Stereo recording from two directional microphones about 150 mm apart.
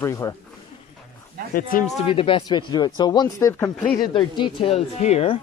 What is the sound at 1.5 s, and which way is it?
Speech, 70° left (ahead or behind).